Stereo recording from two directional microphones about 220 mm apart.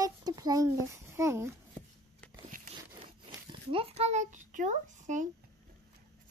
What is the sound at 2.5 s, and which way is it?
Biting, 40° right (ahead or behind).